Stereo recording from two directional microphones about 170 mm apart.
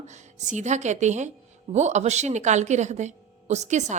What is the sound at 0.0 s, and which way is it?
A woman's voice, 45° right (ahead or behind).